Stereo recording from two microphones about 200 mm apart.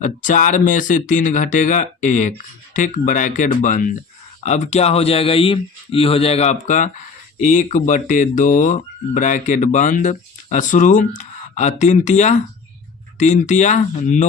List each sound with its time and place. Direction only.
0.0 s speech: 40° left (ahead or behind)